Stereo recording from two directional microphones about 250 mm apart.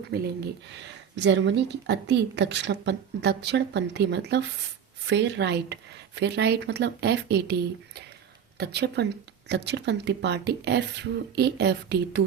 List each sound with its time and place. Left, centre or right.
0.1 s speech: right